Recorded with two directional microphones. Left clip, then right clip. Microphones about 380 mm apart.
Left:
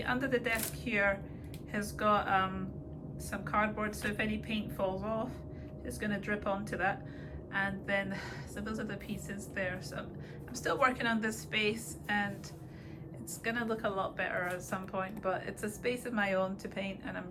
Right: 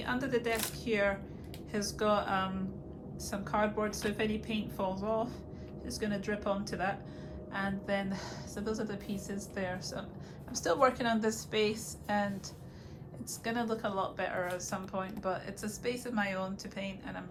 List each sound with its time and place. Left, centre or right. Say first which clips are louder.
0.0 s a woman's voice: left 1 dB; centre
13.4 s a woman's voice: even; centre